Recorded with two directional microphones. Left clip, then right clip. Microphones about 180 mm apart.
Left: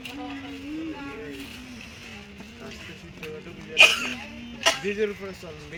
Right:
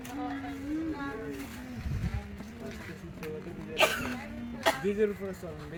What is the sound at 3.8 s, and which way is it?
Speech, 60° right (ahead or behind).